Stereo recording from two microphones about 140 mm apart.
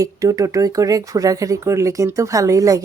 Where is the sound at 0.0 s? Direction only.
25° right (ahead or behind).